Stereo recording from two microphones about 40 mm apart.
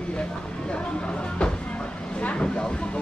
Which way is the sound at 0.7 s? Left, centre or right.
Left.